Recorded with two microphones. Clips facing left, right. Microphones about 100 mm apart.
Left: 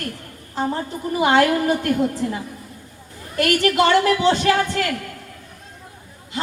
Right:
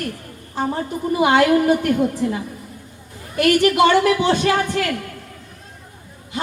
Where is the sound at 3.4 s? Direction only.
15° right (ahead or behind).